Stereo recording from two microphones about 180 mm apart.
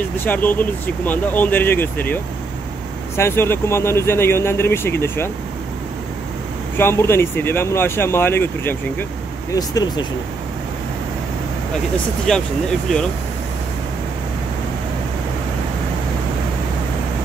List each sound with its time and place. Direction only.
0.2 s speech: 10° left (ahead or behind)
6.8 s speech: 15° left (ahead or behind)
12.3 s speech: 5° left (ahead or behind)